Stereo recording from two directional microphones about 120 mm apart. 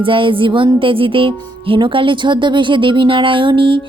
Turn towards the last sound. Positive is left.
turn(degrees=-45)  # may be behind; listen again after turning